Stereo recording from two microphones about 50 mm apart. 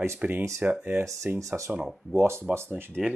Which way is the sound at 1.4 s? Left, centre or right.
Right.